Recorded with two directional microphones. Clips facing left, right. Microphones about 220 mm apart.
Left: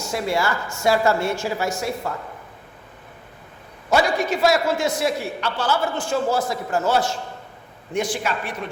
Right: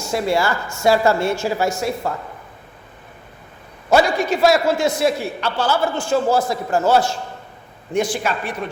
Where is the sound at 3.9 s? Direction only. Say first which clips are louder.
Right 4 dB; 30° right (ahead or behind).